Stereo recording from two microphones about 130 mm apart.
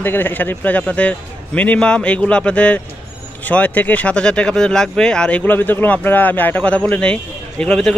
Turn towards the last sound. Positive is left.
turn(degrees=5)  # may be behind; listen again after turning